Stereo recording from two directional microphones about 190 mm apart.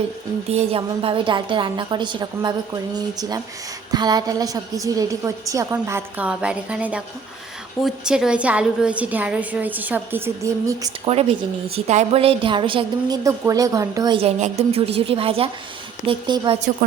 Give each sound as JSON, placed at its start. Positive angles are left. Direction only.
{"t": 0.5, "sound": "a woman's voice", "side_deg": -30}
{"t": 11.7, "sound": "a woman's voice", "side_deg": -35}